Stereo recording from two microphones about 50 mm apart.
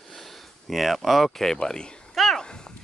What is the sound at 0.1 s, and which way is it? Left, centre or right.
Speech, centre.